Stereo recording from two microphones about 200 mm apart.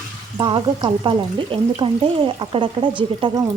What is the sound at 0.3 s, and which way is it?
Speech, 20° right (ahead or behind).